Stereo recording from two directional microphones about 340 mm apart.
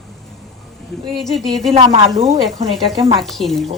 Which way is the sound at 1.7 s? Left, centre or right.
Centre.